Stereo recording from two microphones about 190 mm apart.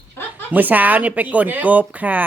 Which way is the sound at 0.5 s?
10° right (ahead or behind).